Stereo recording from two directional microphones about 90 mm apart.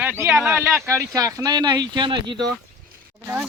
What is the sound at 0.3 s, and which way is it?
Speech, 5° right (ahead or behind).